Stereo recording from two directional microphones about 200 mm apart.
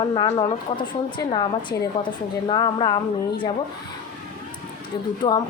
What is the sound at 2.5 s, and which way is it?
A woman's voice, 20° left (ahead or behind).